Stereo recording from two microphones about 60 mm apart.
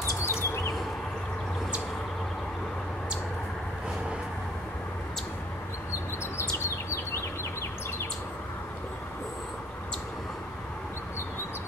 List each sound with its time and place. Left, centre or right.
0.2 s bird: left